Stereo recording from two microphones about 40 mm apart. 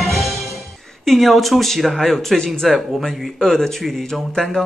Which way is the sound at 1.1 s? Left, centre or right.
Centre.